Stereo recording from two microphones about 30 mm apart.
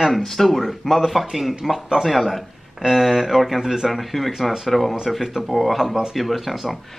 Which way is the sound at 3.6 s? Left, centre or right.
Centre.